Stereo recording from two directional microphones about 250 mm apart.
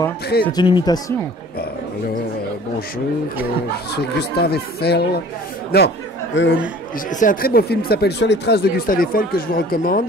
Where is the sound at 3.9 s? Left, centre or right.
Left.